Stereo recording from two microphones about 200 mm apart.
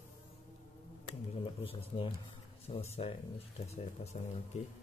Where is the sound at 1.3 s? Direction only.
30° left (ahead or behind).